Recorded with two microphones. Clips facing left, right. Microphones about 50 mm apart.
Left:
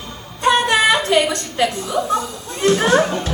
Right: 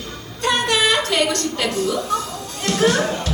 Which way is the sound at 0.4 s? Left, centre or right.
Left.